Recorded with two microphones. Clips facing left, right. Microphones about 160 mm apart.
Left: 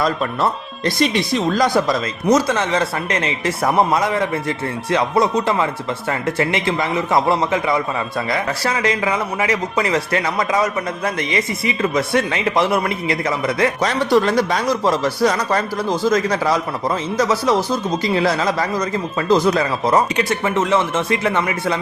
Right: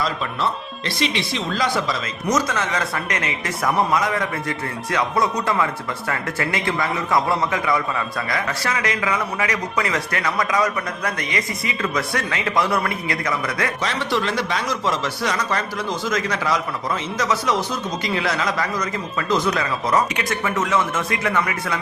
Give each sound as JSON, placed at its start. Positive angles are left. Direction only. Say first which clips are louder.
{"t": 0.0, "sound": "speech", "louder": "left 5 dB", "side_deg": 50}
{"t": 2.2, "sound": "a man's voice", "louder": "left 5 dB", "side_deg": 30}
{"t": 13.8, "sound": "speech", "louder": "left 8 dB", "side_deg": 40}